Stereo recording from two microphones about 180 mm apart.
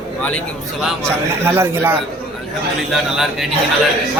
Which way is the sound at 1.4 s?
15° right (ahead or behind).